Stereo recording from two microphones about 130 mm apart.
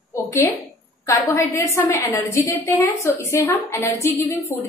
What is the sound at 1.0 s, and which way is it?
A woman's voice, 25° left (ahead or behind).